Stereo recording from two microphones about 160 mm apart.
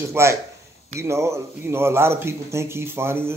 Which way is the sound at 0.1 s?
15° right (ahead or behind).